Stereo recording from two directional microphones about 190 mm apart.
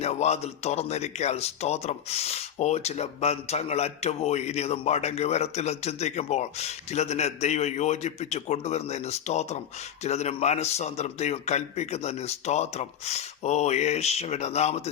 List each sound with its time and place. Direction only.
0.0 s speech: 35° left (ahead or behind)